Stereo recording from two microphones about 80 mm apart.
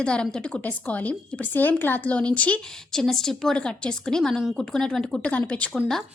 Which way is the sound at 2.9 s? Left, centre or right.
Centre.